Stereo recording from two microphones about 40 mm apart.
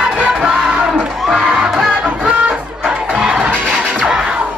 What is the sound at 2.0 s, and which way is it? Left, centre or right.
Music, right.